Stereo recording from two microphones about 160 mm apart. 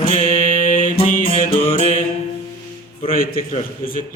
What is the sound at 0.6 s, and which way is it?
Mantra, 55° left (ahead or behind).